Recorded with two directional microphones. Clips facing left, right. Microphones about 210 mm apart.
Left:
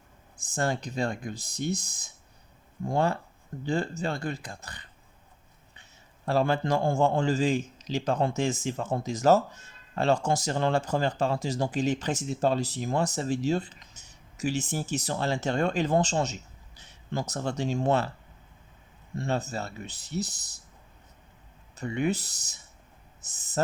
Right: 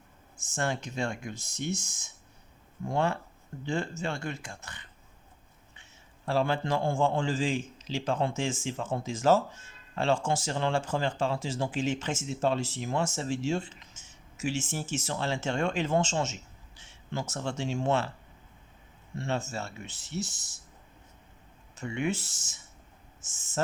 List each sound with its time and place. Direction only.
0.4 s a man's voice: 35° left (ahead or behind)
19.1 s a man's voice: 35° left (ahead or behind)
21.8 s a man's voice: 35° left (ahead or behind)